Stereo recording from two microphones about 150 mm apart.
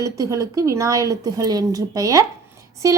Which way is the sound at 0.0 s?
20° right (ahead or behind).